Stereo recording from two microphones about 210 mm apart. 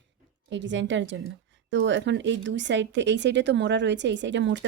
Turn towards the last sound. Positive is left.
turn(degrees=-60)  # may be behind; listen again after turning